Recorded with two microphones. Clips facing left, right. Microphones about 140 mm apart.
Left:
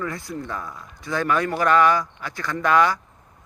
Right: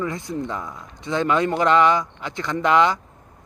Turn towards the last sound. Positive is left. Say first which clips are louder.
# right 1 dB
turn(degrees=-20)  # may be behind; listen again after turning